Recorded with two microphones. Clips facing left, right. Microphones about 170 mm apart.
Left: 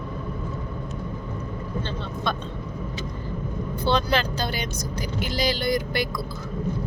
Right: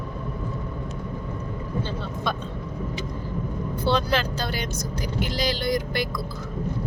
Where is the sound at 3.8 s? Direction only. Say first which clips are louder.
Even; 5° right (ahead or behind).